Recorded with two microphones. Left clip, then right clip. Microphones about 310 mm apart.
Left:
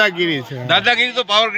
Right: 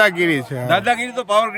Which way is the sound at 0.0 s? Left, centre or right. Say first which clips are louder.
Right 1 dB; centre.